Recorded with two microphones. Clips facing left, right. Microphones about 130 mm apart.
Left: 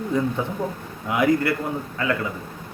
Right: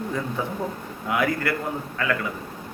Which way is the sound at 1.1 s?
20° left (ahead or behind).